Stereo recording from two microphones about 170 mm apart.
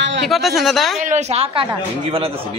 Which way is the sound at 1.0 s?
45° right (ahead or behind).